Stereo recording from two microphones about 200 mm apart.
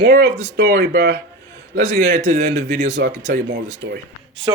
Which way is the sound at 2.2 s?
45° right (ahead or behind).